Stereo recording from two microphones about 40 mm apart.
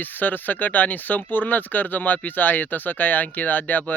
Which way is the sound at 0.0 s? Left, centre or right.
Left.